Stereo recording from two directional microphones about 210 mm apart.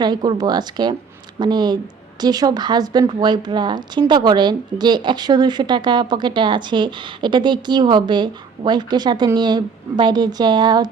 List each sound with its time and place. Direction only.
0.0 s a woman's voice: 20° right (ahead or behind)